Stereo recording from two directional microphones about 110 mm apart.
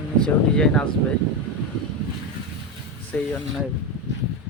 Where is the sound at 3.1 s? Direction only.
10° left (ahead or behind).